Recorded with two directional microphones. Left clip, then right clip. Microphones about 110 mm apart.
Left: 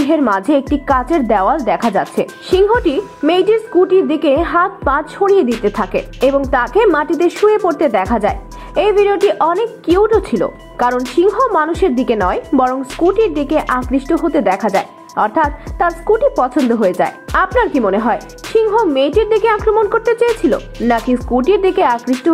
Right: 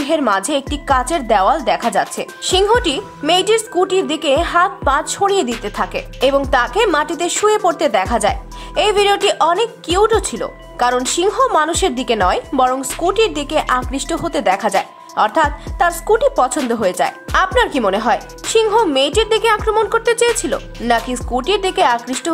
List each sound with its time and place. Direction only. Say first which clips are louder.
0.3 s a woman's voice: left 3 dB; 30° right (ahead or behind)